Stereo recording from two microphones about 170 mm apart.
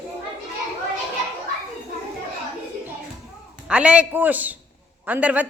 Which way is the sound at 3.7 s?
5° right (ahead or behind).